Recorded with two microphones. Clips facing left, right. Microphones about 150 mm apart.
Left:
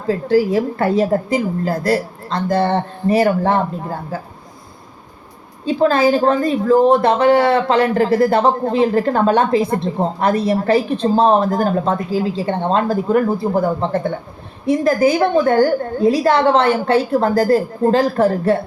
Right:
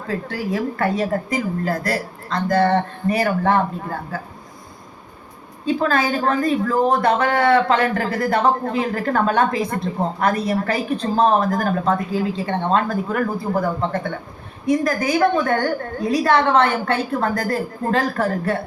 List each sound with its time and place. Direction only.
0.1 s a woman's voice: 30° left (ahead or behind)
5.6 s a woman's voice: 25° left (ahead or behind)